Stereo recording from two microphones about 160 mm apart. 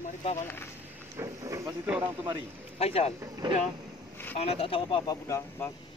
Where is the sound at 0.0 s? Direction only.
45° left (ahead or behind).